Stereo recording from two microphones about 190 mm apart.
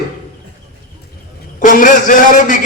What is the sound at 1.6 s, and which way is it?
A man's voice, 45° left (ahead or behind).